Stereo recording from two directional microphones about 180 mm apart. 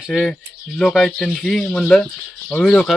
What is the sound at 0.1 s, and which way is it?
Speech, centre (ahead or behind).